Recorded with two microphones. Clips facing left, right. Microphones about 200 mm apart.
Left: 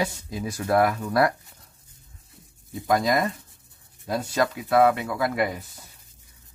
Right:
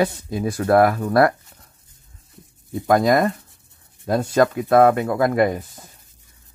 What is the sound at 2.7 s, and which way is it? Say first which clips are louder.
Speech: right 6 dB; 55° right (ahead or behind).